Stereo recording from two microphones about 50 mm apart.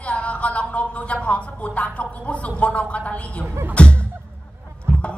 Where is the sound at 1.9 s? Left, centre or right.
Left.